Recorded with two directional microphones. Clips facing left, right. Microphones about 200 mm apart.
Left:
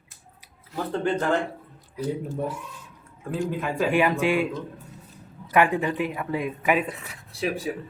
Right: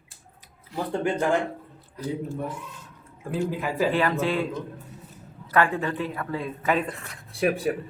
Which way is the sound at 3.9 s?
15° left (ahead or behind).